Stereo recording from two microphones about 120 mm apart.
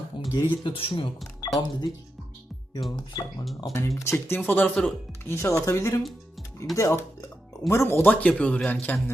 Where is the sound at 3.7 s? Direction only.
25° left (ahead or behind); by 4.9 s 5° left (ahead or behind).